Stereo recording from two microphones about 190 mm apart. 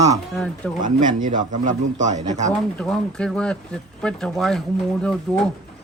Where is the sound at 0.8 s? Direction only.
40° right (ahead or behind).